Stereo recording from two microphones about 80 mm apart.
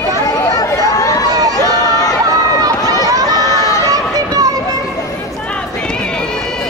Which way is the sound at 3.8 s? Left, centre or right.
Right.